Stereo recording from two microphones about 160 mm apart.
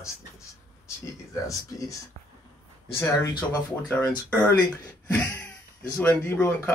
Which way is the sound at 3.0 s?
20° left (ahead or behind).